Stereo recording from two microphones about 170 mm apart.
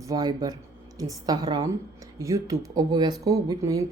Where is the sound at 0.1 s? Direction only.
25° right (ahead or behind).